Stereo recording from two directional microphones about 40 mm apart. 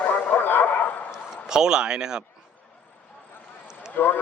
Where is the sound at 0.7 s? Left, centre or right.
Left.